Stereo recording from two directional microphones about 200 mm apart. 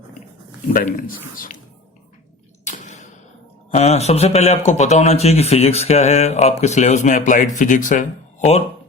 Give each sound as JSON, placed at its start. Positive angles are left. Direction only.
{"t": 0.7, "sound": "a man's voice", "side_deg": 45}
{"t": 2.6, "sound": "a sound", "side_deg": 35}
{"t": 3.7, "sound": "speech", "side_deg": 35}